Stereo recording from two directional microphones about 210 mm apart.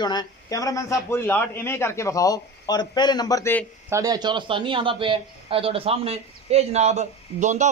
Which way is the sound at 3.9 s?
15° right (ahead or behind).